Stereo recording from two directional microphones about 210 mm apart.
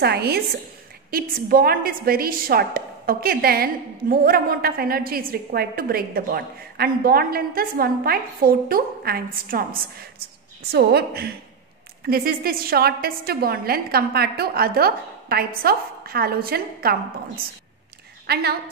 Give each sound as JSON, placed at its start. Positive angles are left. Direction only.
{"t": 0.0, "sound": "a woman's voice", "side_deg": -50}
{"t": 18.2, "sound": "a woman's voice", "side_deg": -50}